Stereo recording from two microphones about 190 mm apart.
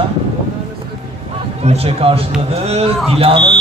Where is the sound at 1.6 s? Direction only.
35° right (ahead or behind).